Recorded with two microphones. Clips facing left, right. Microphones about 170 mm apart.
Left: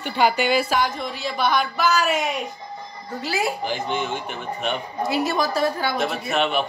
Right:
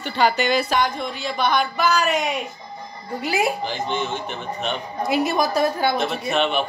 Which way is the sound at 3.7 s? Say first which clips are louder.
Even; 10° left (ahead or behind).